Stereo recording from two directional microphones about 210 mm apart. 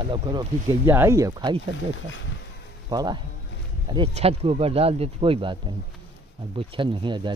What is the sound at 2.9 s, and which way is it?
Speech, 20° right (ahead or behind).